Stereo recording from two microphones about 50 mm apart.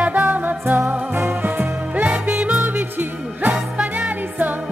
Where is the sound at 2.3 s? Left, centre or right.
Centre.